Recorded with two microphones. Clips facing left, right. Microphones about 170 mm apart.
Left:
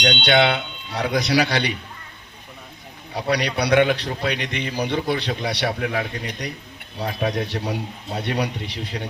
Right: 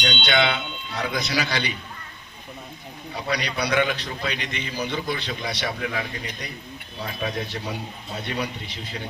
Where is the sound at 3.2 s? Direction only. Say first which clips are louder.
Left 5 dB; 65° left (ahead or behind).